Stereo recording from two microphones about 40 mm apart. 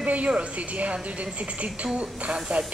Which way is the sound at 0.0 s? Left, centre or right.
Right.